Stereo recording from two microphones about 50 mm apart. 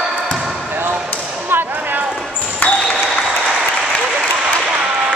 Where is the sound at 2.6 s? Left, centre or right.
Left.